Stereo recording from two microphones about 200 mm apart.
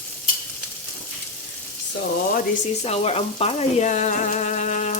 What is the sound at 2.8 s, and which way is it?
Frying, 30° left (ahead or behind).